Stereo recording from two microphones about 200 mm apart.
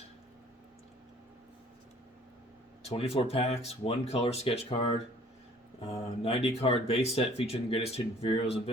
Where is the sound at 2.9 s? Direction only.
30° left (ahead or behind).